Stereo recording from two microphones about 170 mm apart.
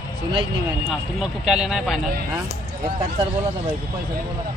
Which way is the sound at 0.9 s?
5° right (ahead or behind).